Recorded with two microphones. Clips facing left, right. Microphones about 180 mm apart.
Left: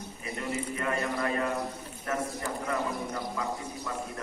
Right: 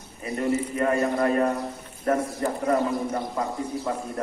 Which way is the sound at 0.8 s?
40° right (ahead or behind).